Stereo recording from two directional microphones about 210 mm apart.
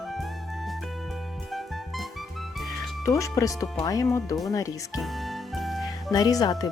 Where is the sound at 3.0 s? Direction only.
15° left (ahead or behind).